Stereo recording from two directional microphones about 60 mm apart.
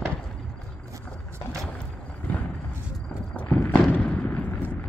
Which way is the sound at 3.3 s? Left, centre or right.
Left.